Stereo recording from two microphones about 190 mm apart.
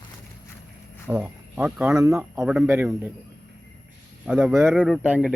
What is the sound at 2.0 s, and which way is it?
Speech, 15° right (ahead or behind).